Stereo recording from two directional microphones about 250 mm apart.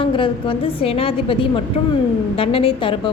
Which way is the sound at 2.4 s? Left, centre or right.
Left.